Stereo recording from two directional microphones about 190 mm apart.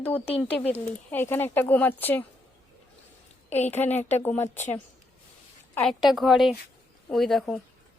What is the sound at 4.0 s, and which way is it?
Speech, 35° left (ahead or behind).